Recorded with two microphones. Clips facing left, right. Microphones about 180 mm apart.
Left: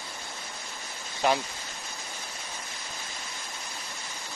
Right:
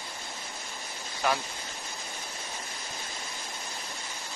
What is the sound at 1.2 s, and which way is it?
Speech, 25° left (ahead or behind).